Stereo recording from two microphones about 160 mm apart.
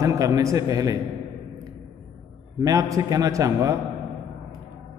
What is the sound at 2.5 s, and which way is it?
A man's voice, 20° right (ahead or behind).